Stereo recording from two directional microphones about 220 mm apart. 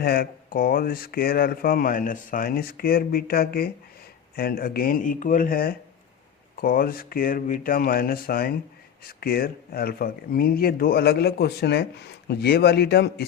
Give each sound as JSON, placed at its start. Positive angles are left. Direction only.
{"t": 0.0, "sound": "speech", "side_deg": 40}